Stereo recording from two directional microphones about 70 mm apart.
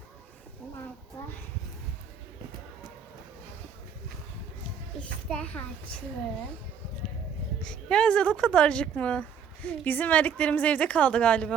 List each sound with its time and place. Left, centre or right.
5.3 s a woman's voice: centre
7.6 s a woman's voice: centre